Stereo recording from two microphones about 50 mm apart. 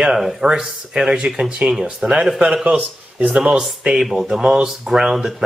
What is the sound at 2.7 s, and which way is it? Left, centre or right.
Speech, right.